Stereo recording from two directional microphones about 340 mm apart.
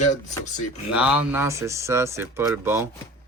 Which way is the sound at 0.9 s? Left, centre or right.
Centre.